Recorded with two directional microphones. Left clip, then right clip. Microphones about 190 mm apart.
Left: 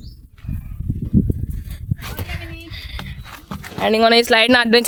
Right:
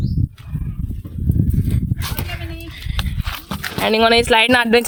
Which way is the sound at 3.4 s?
60° right (ahead or behind).